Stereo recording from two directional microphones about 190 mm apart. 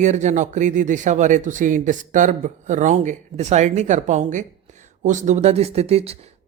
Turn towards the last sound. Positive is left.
turn(degrees=-30)  # may be behind; listen again after turning